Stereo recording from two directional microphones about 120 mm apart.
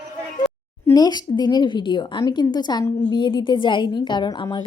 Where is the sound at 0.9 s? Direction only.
35° left (ahead or behind).